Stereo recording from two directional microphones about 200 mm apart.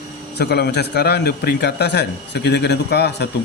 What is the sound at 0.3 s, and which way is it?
A man's voice, 55° left (ahead or behind).